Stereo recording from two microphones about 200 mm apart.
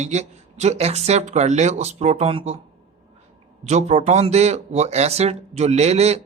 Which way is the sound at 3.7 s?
35° right (ahead or behind).